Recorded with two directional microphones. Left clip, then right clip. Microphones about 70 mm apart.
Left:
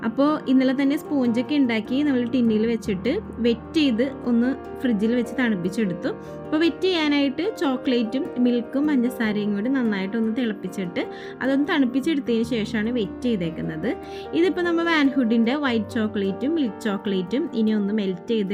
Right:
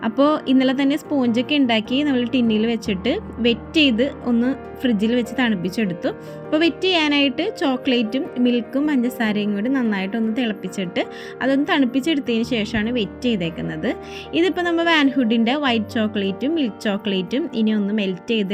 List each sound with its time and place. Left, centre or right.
0.0 s a woman's voice: right